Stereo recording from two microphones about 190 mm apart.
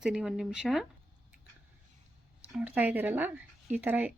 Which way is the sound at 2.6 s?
5° right (ahead or behind).